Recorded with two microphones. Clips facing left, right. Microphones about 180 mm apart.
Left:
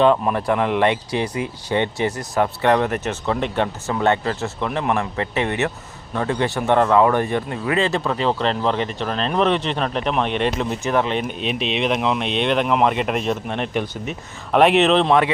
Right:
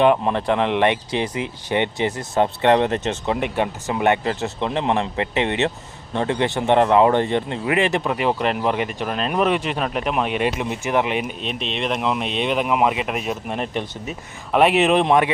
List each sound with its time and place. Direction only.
0.0 s speech: 20° right (ahead or behind)
11.3 s speech: 5° left (ahead or behind); by 15.3 s 15° right (ahead or behind)